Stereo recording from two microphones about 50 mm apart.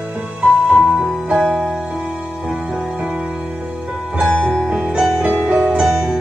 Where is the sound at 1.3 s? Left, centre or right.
Right.